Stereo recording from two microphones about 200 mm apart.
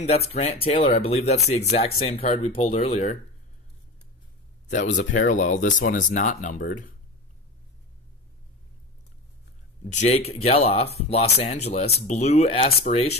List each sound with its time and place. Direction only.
0.1 s speech: 30° left (ahead or behind)
4.6 s speech: 40° left (ahead or behind)
9.9 s speech: 30° left (ahead or behind)